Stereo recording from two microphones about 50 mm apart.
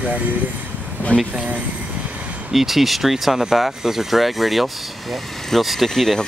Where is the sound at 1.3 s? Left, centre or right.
Right.